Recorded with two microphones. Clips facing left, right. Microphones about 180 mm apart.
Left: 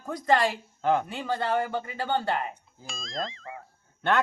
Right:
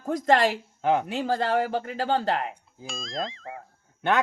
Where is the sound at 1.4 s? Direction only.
90° right.